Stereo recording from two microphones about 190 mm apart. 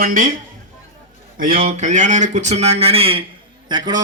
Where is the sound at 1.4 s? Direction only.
45° right (ahead or behind).